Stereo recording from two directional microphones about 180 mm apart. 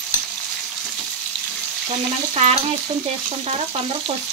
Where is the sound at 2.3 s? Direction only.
35° right (ahead or behind).